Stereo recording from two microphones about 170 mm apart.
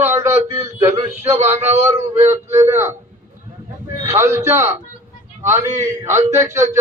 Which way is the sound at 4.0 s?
15° right (ahead or behind).